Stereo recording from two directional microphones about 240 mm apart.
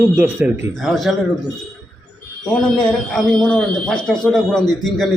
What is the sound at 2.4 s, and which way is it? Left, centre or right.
A man's voice, centre.